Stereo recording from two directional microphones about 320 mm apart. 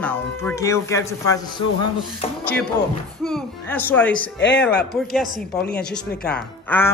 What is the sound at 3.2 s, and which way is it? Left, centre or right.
A woman's voice, centre.